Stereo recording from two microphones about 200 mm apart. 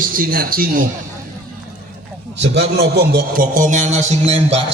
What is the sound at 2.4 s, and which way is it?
A man's voice, 55° right (ahead or behind).